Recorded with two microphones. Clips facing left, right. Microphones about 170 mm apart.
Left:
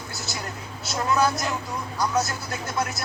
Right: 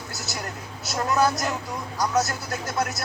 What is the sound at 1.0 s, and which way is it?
Speech, 40° right (ahead or behind).